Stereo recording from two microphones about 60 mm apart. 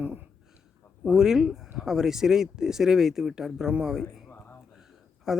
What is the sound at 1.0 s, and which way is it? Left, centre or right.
Speech, centre.